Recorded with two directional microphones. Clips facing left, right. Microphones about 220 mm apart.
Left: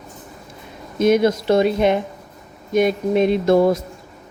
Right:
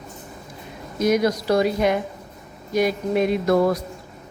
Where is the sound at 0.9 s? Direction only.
25° left (ahead or behind).